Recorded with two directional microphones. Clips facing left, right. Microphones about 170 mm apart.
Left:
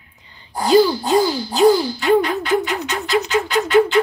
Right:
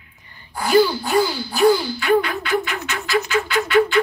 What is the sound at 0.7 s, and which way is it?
Speech, 20° left (ahead or behind).